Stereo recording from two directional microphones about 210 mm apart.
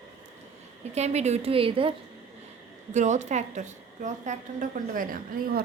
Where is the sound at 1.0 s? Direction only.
30° right (ahead or behind).